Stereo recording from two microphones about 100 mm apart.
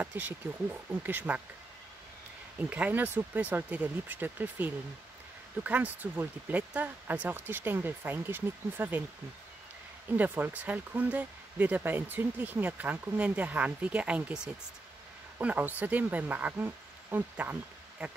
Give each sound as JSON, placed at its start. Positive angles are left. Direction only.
{"t": 0.0, "sound": "speech", "side_deg": -20}
{"t": 2.7, "sound": "speech", "side_deg": -15}
{"t": 10.1, "sound": "speech", "side_deg": -15}